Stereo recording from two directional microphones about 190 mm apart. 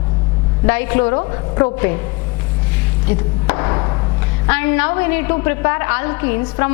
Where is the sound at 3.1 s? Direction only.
15° left (ahead or behind).